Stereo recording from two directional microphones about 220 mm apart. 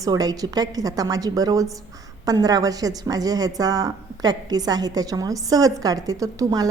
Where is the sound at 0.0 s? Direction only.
15° right (ahead or behind).